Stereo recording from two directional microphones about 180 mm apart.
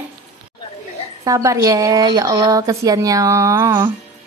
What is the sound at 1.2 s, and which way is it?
A woman's voice, 20° right (ahead or behind).